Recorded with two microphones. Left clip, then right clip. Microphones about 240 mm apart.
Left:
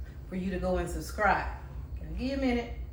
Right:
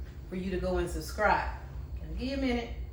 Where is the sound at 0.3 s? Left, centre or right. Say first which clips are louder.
Left 1 dB; centre.